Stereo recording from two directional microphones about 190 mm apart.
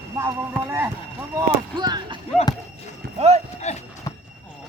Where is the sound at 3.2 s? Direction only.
35° right (ahead or behind).